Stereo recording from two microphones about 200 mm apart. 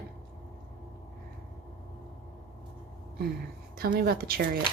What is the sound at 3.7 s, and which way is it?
Speech, 45° right (ahead or behind).